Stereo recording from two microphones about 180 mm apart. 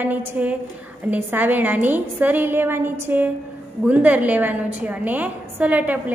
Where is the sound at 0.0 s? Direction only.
10° right (ahead or behind).